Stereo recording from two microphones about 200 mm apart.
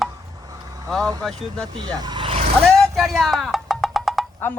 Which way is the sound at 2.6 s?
Centre (ahead or behind).